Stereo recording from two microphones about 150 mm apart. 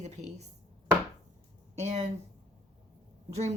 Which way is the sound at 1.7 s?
50° right (ahead or behind).